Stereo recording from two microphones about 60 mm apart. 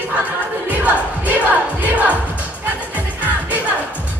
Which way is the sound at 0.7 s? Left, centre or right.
Right.